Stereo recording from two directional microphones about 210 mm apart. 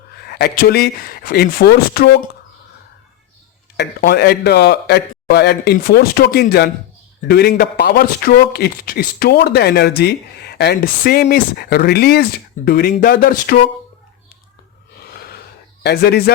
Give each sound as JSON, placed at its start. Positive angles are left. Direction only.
{"t": 0.2, "sound": "speech", "side_deg": 50}
{"t": 3.8, "sound": "speech", "side_deg": 50}
{"t": 15.0, "sound": "gasp", "side_deg": 50}
{"t": 15.8, "sound": "speech", "side_deg": 50}